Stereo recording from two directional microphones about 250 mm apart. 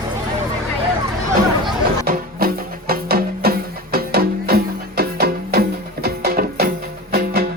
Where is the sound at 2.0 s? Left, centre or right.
Right.